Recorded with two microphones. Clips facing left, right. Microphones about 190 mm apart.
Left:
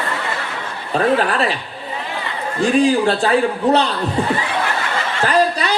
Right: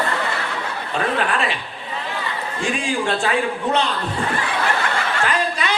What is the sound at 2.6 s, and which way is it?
A man's voice, 35° left (ahead or behind).